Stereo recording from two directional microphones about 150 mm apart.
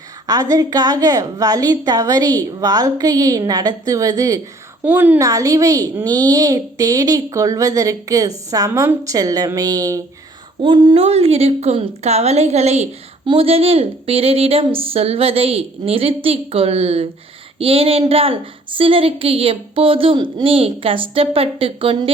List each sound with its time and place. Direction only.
0.3 s a woman's voice: 25° right (ahead or behind)
4.8 s a woman's voice: 10° right (ahead or behind); by 22.1 s 35° right (ahead or behind)